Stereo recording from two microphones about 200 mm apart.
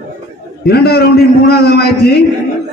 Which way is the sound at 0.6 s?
50° left (ahead or behind).